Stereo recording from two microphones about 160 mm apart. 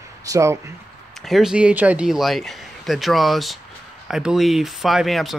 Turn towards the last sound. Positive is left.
turn(degrees=0)  # may be behind; listen again after turning